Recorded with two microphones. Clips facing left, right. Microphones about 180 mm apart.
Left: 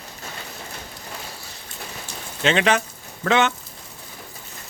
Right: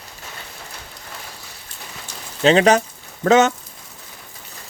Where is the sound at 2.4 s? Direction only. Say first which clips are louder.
Right 6 dB; 40° right (ahead or behind).